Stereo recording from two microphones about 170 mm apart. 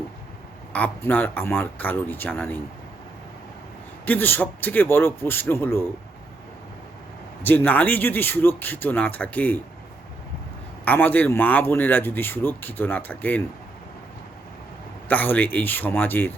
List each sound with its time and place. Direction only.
0.7 s speech: 10° left (ahead or behind)
4.0 s speech: 10° left (ahead or behind)
7.4 s speech: 10° left (ahead or behind)
10.8 s speech: 10° left (ahead or behind)
15.0 s speech: 10° left (ahead or behind)